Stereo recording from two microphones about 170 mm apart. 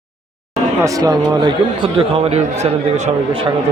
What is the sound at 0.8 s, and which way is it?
Speech, 20° right (ahead or behind).